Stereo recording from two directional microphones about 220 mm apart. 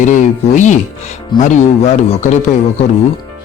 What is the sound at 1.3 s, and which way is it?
Speech, 20° left (ahead or behind).